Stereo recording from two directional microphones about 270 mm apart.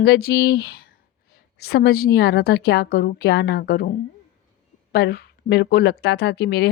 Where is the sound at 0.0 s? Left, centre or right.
Left.